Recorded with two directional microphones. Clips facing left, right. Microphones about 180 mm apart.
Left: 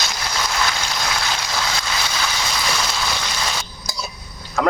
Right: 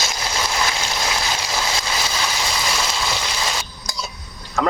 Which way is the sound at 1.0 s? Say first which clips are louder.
Even; 10° right (ahead or behind).